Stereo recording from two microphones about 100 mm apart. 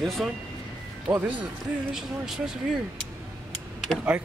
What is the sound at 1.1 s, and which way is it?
Speech, 15° right (ahead or behind).